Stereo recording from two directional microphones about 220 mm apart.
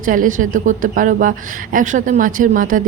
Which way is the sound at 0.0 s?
35° right (ahead or behind).